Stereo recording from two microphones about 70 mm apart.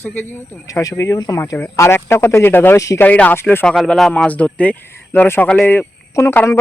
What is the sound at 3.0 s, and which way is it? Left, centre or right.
Speech, left.